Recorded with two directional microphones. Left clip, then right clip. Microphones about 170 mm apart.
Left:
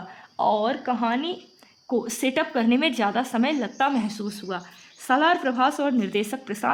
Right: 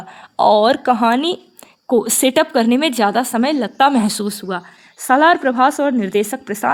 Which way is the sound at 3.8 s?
80° right.